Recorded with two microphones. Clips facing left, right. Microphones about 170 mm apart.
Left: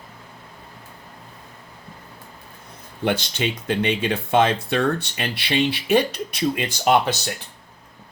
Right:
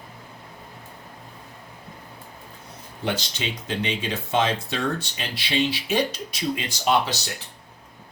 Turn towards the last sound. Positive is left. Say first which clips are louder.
# left 4 dB
turn(degrees=60)  # may be behind; listen again after turning